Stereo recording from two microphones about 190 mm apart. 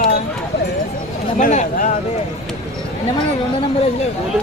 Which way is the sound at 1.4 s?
40° left (ahead or behind).